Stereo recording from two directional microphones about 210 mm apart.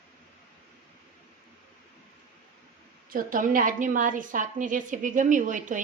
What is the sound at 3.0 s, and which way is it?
A woman's voice, 40° right (ahead or behind).